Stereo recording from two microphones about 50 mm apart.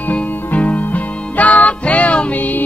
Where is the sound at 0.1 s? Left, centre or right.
Left.